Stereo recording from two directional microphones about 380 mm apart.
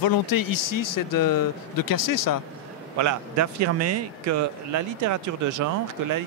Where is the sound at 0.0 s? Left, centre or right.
Left.